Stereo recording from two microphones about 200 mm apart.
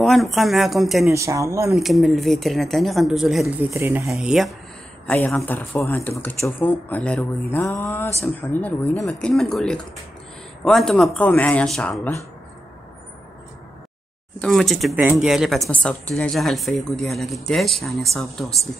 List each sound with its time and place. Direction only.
0.0 s speech: centre (ahead or behind)
1.1 s speech: 15° right (ahead or behind)
1.8 s speech: centre (ahead or behind)
14.4 s speech: centre (ahead or behind)